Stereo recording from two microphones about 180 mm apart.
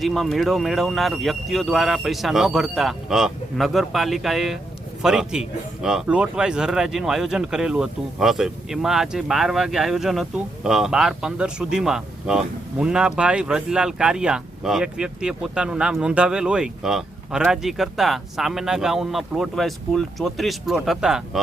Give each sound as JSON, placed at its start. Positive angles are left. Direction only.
{"t": 0.0, "sound": "a man's voice", "side_deg": 0}